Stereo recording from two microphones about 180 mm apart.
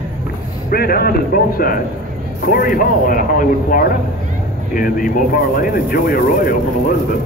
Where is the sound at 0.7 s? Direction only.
60° left (ahead or behind).